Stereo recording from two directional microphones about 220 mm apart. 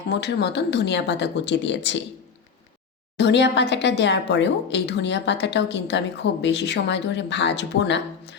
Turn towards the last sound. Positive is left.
turn(degrees=55)  # may be behind; listen again after turning